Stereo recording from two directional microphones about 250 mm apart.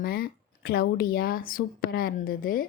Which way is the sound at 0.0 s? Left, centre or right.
Left.